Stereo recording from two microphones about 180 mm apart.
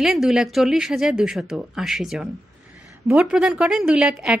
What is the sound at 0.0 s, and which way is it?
Speech, centre (ahead or behind).